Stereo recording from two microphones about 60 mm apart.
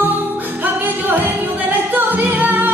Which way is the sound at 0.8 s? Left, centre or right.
Right.